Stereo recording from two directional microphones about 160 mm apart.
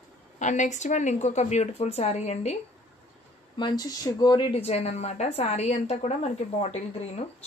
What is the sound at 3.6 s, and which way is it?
Speech, 25° left (ahead or behind).